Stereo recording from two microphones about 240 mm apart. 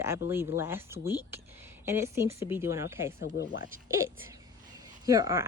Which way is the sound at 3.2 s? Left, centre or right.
Left.